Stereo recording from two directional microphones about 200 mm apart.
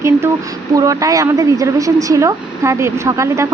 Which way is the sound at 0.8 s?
15° right (ahead or behind).